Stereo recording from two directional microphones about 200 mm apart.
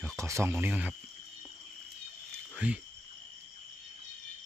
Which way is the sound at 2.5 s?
5° right (ahead or behind).